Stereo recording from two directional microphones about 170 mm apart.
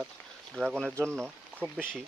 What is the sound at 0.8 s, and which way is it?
Speech, 15° right (ahead or behind).